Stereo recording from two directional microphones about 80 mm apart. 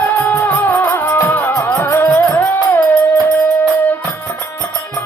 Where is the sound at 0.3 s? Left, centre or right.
Left.